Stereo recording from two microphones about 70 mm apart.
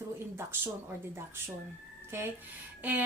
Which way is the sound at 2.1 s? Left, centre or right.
Right.